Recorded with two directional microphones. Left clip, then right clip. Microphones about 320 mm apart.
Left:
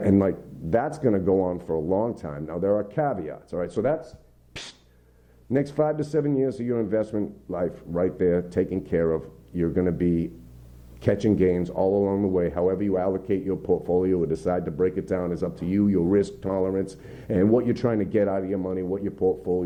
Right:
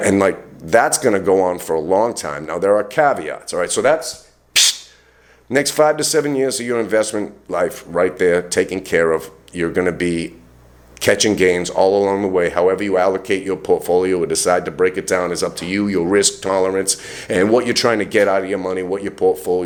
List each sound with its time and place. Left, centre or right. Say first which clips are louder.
0.0 s a man's voice: right 8 dB; centre
19.2 s speech: right 8 dB; right